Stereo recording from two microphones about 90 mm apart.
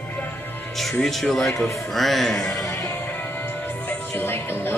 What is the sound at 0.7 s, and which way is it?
Speech, centre (ahead or behind).